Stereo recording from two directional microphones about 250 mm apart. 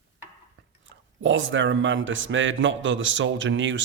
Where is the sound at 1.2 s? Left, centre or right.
Right.